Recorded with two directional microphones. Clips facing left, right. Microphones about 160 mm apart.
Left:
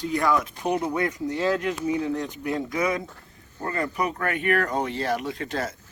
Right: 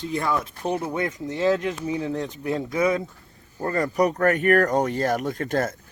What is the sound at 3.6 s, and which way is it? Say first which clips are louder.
Speech: right 5 dB; 40° right (ahead or behind).